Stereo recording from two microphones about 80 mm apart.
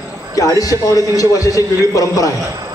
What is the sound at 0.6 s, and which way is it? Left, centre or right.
A man's voice, left.